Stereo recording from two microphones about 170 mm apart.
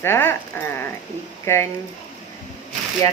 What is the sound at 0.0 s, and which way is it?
Speech, 15° left (ahead or behind).